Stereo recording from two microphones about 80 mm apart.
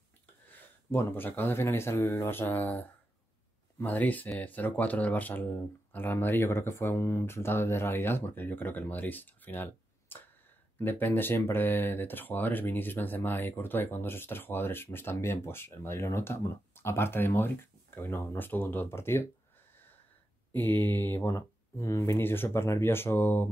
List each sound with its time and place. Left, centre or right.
0.5 s speech: left
20.5 s speech: left